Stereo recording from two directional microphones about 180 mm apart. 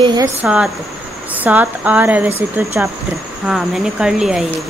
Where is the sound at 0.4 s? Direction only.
5° right (ahead or behind).